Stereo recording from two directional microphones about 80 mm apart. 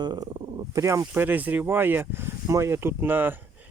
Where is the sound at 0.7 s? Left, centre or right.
Right.